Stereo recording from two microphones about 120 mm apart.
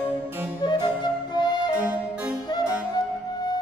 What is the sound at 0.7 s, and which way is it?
Music, 35° left (ahead or behind).